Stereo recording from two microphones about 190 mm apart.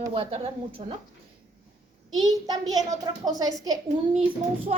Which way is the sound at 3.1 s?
20° right (ahead or behind).